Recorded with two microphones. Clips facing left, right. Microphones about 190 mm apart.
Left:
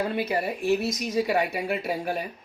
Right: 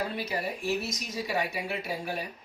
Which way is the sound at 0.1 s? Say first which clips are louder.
Left 6 dB; 55° left (ahead or behind).